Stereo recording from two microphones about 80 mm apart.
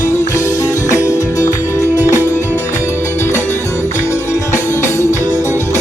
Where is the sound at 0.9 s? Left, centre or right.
Left.